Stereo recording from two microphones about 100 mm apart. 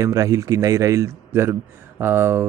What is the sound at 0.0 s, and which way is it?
A man's voice, 30° right (ahead or behind).